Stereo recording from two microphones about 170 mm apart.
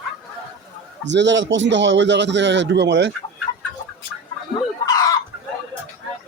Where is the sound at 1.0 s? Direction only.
90° right.